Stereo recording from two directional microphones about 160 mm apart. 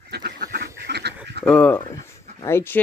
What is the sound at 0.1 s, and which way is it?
Duck, 75° right (ahead or behind).